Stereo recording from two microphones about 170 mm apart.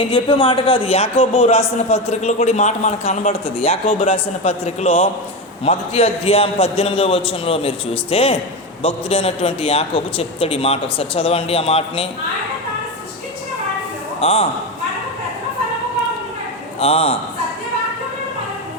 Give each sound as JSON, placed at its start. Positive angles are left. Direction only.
{"t": 0.1, "sound": "a man's voice", "side_deg": 30}
{"t": 14.2, "sound": "a man's voice", "side_deg": 35}
{"t": 16.8, "sound": "a man's voice", "side_deg": 35}